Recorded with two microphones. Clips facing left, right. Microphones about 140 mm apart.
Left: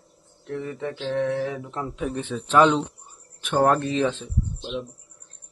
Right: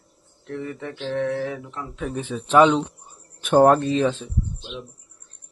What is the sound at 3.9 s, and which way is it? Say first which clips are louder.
Speech: right 2 dB; 5° right (ahead or behind).